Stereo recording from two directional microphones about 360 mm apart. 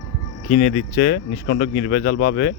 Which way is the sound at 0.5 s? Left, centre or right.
Left.